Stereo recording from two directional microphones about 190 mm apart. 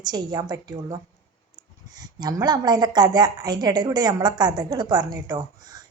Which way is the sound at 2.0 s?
20° right (ahead or behind).